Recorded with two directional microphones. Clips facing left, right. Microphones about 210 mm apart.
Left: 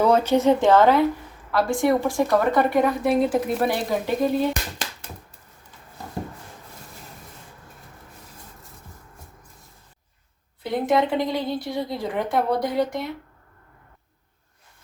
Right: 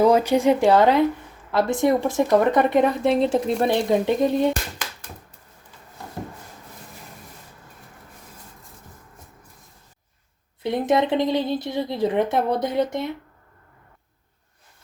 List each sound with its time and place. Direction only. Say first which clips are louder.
0.0 s speech: right 1 dB; 10° right (ahead or behind)
10.6 s speech: right 1 dB; 20° right (ahead or behind)